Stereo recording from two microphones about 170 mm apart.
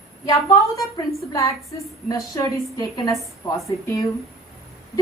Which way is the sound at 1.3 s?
20° left (ahead or behind).